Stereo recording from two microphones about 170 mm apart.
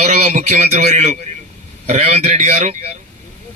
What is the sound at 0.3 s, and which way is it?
A man's voice, 45° right (ahead or behind).